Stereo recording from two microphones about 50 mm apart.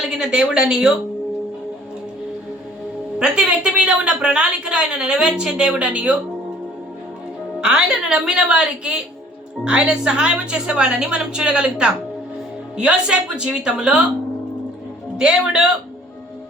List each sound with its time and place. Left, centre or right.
0.0 s speech: centre
3.2 s a woman's voice: centre
7.6 s a woman's voice: centre
15.2 s speech: centre